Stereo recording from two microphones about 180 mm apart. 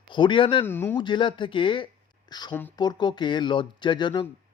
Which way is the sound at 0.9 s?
25° left (ahead or behind).